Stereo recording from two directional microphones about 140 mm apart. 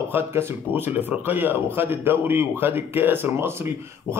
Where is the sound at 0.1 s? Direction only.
15° right (ahead or behind).